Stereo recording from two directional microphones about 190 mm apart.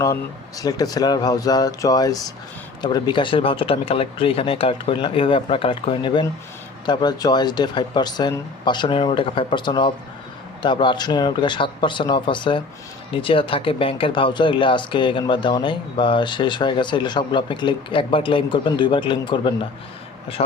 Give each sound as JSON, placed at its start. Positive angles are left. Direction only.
{"t": 0.0, "sound": "speech", "side_deg": 20}